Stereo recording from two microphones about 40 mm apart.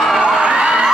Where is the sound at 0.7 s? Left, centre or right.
Centre.